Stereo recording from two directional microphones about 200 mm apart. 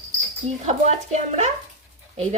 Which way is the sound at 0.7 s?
35° right (ahead or behind).